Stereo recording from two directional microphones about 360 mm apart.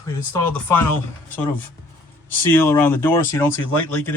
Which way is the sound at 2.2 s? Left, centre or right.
Centre.